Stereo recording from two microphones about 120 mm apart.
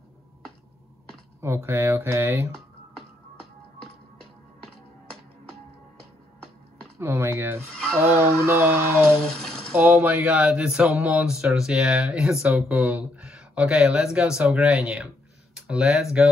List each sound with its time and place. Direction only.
1.4 s speech: 20° right (ahead or behind)
7.0 s speech: 20° right (ahead or behind)
9.4 s coin: 5° left (ahead or behind)
9.8 s speech: 10° right (ahead or behind)